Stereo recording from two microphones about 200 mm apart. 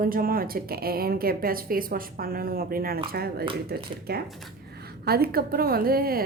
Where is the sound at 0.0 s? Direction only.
45° right (ahead or behind).